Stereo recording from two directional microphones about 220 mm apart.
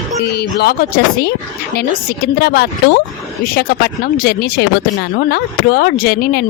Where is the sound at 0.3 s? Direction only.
50° left (ahead or behind).